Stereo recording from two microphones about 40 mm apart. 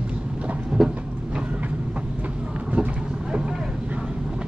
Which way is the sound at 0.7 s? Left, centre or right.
Centre.